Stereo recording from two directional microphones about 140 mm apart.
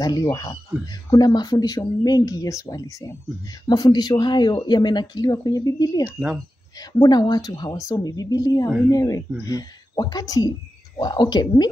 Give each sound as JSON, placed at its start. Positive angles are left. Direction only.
{"t": 0.0, "sound": "speech", "side_deg": 25}
{"t": 6.0, "sound": "speech", "side_deg": -10}
{"t": 7.0, "sound": "speech", "side_deg": 30}